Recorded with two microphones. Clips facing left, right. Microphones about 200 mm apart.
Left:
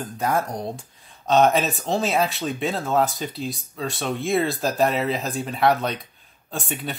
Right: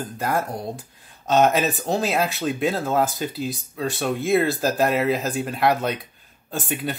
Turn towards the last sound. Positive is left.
turn(degrees=0)  # may be behind; listen again after turning